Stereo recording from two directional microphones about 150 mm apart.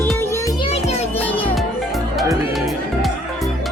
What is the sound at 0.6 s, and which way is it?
Music, 45° left (ahead or behind).